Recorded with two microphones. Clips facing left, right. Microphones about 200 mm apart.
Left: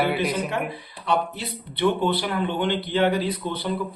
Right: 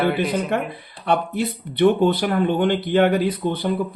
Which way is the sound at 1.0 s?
50° right (ahead or behind).